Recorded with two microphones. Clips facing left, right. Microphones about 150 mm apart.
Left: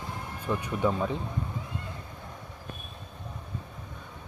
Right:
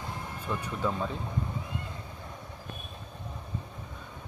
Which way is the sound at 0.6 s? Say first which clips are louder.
Left 4 dB; 15° left (ahead or behind).